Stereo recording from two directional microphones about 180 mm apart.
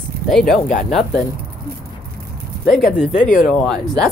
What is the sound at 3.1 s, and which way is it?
Speech, 45° left (ahead or behind).